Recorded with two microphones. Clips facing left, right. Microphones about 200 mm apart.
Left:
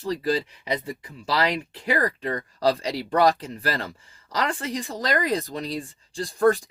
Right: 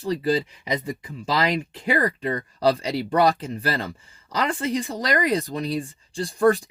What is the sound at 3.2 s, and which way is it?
Speech, 15° right (ahead or behind).